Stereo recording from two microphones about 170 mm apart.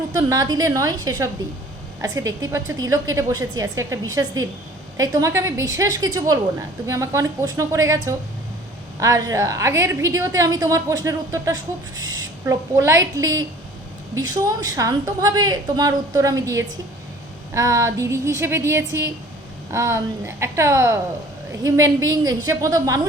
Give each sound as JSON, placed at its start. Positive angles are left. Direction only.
{"t": 0.1, "sound": "a woman's voice", "side_deg": -20}
{"t": 14.4, "sound": "a woman's voice", "side_deg": -20}